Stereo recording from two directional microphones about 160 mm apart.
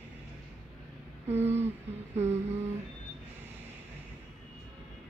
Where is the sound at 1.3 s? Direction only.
15° right (ahead or behind).